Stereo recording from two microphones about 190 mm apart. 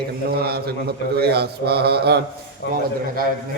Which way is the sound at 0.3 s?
55° right (ahead or behind).